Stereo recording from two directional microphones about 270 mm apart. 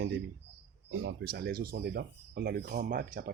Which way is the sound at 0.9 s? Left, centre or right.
Right.